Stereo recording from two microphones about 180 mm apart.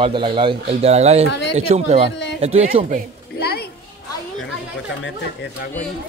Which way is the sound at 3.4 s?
60° left (ahead or behind).